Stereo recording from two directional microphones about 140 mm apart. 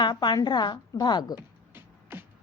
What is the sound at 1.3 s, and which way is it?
Beatboxing, 15° right (ahead or behind).